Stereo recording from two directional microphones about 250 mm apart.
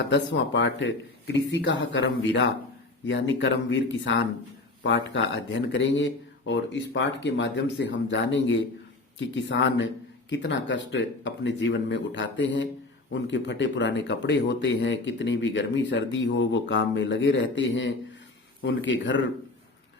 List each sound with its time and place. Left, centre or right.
0.1 s speech: left
3.1 s speech: left